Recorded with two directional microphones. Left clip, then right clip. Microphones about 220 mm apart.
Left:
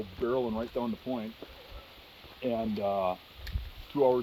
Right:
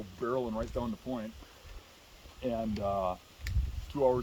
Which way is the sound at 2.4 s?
45° right (ahead or behind).